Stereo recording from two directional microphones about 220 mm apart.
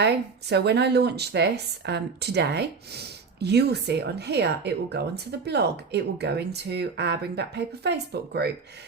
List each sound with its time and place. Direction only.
0.0 s speech: 50° right (ahead or behind)